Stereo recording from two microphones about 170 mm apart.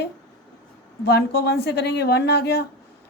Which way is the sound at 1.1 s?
70° left (ahead or behind).